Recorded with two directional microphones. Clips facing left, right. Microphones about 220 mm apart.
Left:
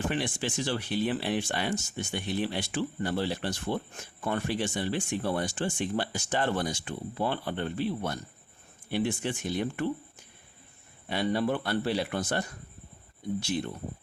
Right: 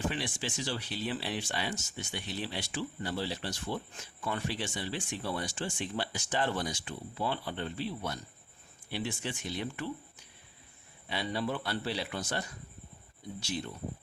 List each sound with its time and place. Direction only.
0.1 s speech: 55° left (ahead or behind)